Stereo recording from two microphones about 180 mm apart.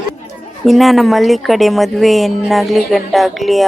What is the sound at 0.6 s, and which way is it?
A woman's voice, centre (ahead or behind).